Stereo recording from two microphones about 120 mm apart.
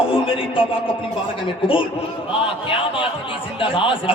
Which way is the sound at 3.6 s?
45° left (ahead or behind).